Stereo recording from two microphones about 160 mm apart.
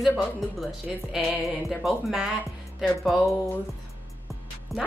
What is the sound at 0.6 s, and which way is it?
Speech, centre (ahead or behind).